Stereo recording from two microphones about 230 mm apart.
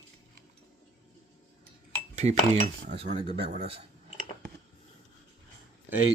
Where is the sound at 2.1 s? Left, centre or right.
Right.